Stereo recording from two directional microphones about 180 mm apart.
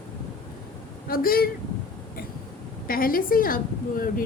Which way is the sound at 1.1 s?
55° left (ahead or behind).